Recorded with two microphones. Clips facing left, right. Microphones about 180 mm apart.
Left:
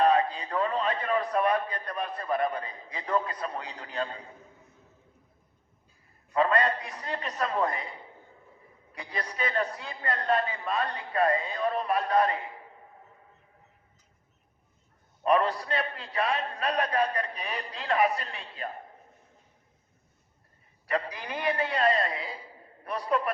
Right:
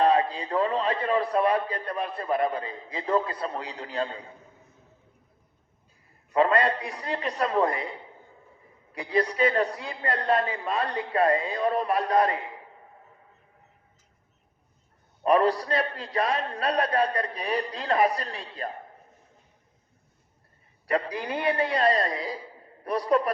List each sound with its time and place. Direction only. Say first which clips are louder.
0.0 s a man's voice: right 1 dB; 30° right (ahead or behind)
6.3 s a man's voice: right 3 dB; 30° right (ahead or behind)
9.0 s a man's voice: right 10 dB; 35° right (ahead or behind)
15.2 s a man's voice: right 3 dB; 35° right (ahead or behind)
20.8 s a man's voice: right 4 dB; 35° right (ahead or behind)